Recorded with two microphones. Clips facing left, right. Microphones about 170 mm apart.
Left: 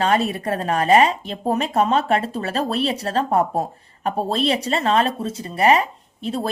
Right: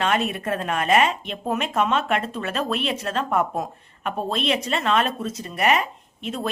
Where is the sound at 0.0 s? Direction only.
35° left (ahead or behind).